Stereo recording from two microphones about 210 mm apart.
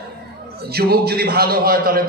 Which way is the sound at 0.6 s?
50° right (ahead or behind).